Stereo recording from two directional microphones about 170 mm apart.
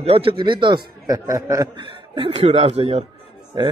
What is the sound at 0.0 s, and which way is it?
A man's voice, 35° right (ahead or behind).